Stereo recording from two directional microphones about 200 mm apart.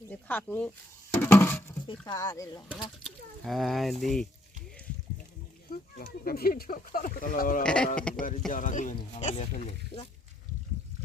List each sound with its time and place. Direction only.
0.1 s speech: 10° left (ahead or behind)
1.2 s patter: 10° left (ahead or behind)
2.0 s speech: 20° left (ahead or behind)
3.0 s speech: centre (ahead or behind)
5.7 s speech: 50° left (ahead or behind)
7.6 s speech: 5° left (ahead or behind)
8.4 s speech: 40° left (ahead or behind)